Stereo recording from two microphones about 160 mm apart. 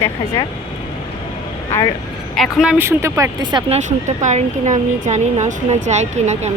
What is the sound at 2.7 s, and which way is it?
Speech, 15° right (ahead or behind).